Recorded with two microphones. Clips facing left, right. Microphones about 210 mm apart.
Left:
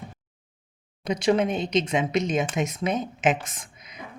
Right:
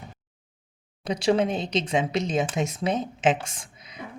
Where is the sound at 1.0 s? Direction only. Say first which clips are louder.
Even; 30° right (ahead or behind).